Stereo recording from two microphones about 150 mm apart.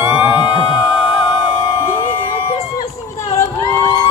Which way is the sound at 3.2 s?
20° left (ahead or behind).